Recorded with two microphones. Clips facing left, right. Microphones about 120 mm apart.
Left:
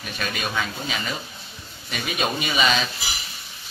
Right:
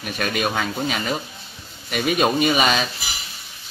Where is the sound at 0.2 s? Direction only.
55° right (ahead or behind).